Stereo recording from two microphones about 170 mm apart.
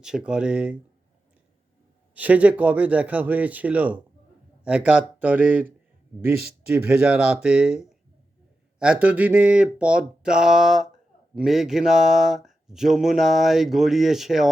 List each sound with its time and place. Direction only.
0.3 s speech: 5° right (ahead or behind)
2.1 s speech: 10° right (ahead or behind)